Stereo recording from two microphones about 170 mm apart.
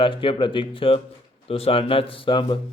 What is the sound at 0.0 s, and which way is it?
Speech, 30° left (ahead or behind).